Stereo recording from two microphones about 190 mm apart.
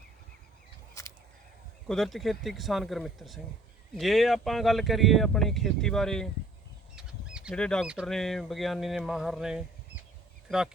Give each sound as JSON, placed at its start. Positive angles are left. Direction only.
{"t": 1.0, "sound": "honk", "side_deg": 15}
{"t": 1.9, "sound": "speech", "side_deg": 0}